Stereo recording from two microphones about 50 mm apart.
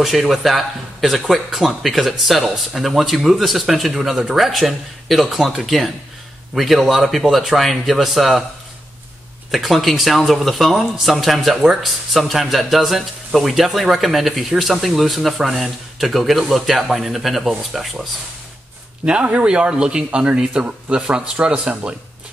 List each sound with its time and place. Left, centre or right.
0.0 s speech: centre
9.5 s speech: centre
19.0 s speech: right